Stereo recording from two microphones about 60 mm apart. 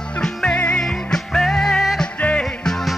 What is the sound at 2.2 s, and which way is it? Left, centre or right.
Music, left.